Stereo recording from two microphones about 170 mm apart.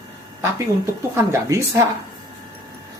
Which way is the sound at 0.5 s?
15° right (ahead or behind).